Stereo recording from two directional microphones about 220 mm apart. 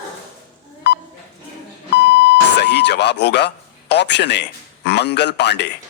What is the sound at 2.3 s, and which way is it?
A man's voice, 50° left (ahead or behind).